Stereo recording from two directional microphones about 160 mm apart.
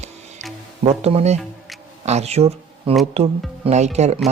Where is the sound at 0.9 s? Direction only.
40° right (ahead or behind).